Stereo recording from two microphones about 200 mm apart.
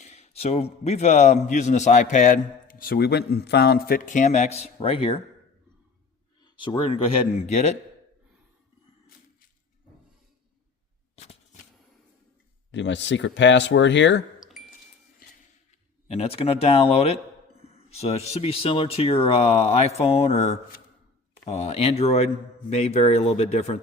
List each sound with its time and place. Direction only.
0.0 s a man's voice: 35° left (ahead or behind)
6.4 s a man's voice: 25° left (ahead or behind)
12.7 s speech: 65° left (ahead or behind)
14.3 s chime: centre (ahead or behind)
15.2 s a sound: 45° left (ahead or behind)
16.0 s speech: 30° left (ahead or behind)
17.6 s a sound: 30° left (ahead or behind)
18.3 s a man's voice: 30° left (ahead or behind)